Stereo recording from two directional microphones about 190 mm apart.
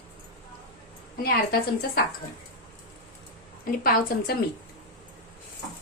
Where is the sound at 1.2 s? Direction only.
55° left (ahead or behind).